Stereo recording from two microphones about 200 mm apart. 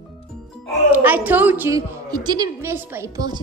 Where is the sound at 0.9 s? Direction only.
10° right (ahead or behind).